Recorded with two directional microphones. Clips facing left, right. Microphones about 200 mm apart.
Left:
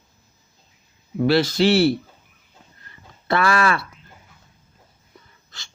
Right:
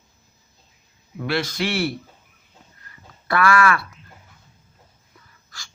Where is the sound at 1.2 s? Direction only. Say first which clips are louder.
Left 7 dB; 30° left (ahead or behind).